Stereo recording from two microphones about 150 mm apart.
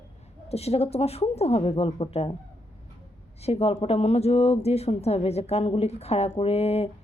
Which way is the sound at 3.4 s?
45° left (ahead or behind).